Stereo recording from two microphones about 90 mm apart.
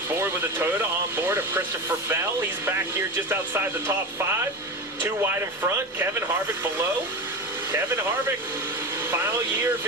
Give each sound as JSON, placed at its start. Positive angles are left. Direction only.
{"t": 0.2, "sound": "speech", "side_deg": -25}
{"t": 5.7, "sound": "speech", "side_deg": -30}
{"t": 9.0, "sound": "speech", "side_deg": -20}